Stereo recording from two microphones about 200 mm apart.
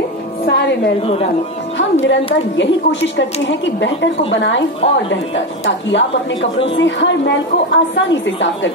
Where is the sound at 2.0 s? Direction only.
65° left (ahead or behind).